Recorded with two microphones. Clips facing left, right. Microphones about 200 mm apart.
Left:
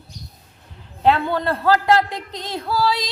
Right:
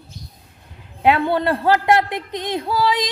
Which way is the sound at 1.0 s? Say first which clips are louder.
Right 1 dB; 15° right (ahead or behind).